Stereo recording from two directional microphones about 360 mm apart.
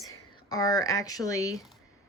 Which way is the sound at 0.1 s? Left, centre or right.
Centre.